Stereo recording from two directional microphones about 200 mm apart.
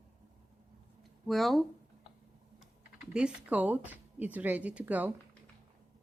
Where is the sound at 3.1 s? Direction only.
5° right (ahead or behind).